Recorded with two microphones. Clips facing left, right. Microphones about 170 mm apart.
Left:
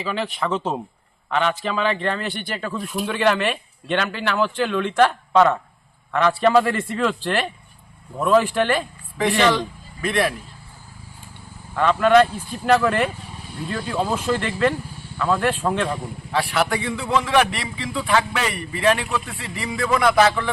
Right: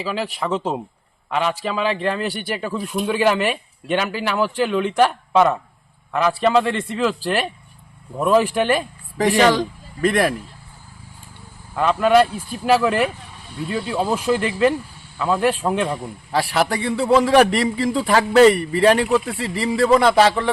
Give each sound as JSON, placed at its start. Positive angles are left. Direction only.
{"t": 0.0, "sound": "a man's voice", "side_deg": -5}
{"t": 9.1, "sound": "a man's voice", "side_deg": -40}
{"t": 11.7, "sound": "a man's voice", "side_deg": -10}
{"t": 16.3, "sound": "a man's voice", "side_deg": -35}